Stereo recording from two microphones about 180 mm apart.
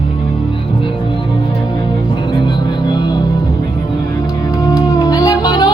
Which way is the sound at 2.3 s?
25° left (ahead or behind).